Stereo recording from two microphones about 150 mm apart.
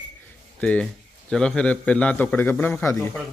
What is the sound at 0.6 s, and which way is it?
Speech, 10° left (ahead or behind).